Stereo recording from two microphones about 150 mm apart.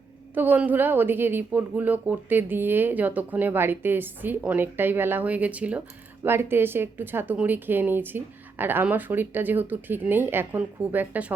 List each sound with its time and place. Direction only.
0.3 s a woman's voice: 10° right (ahead or behind)